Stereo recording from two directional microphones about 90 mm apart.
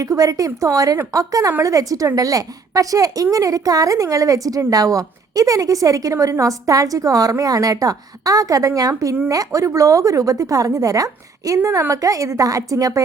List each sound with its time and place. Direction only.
0.0 s a woman's voice: 40° right (ahead or behind)